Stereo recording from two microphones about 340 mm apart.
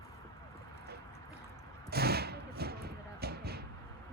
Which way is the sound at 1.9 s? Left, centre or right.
Right.